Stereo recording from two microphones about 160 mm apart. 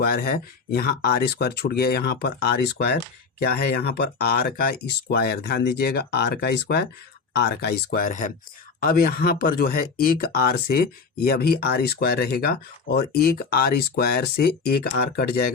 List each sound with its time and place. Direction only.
0.0 s speech: 65° left (ahead or behind); by 6.8 s 90° left
7.3 s speech: 80° left; by 8.3 s 55° left (ahead or behind)
8.8 s speech: 65° left (ahead or behind)